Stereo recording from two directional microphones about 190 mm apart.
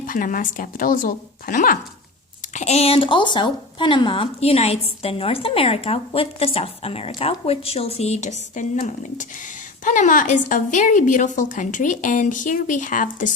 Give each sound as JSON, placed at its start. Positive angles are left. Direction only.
{"t": 0.0, "sound": "a woman's voice", "side_deg": 45}